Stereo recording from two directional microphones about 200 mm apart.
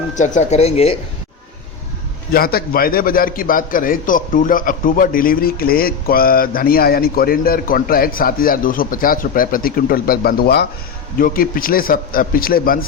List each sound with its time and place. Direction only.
0.2 s speech: 35° left (ahead or behind)
2.3 s a man's voice: 50° left (ahead or behind)